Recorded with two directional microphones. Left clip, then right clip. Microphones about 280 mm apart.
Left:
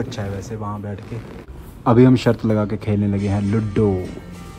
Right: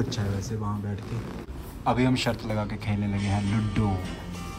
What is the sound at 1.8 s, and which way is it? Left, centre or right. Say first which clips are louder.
A man's voice: left 10 dB; centre.